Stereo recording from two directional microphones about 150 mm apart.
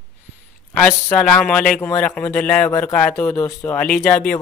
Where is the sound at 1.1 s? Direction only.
5° left (ahead or behind).